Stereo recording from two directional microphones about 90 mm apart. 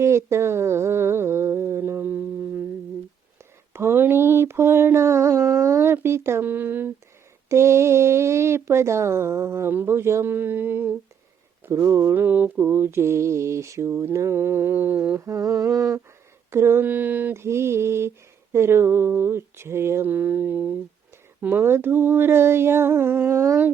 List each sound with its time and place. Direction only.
0.0 s humming: 30° right (ahead or behind)
3.7 s a sound: 25° right (ahead or behind)
7.5 s mantra: 30° right (ahead or behind)
11.6 s speech: 30° right (ahead or behind)
12.1 s mantra: 20° right (ahead or behind)
15.2 s humming: 40° right (ahead or behind)
16.5 s mantra: 30° right (ahead or behind)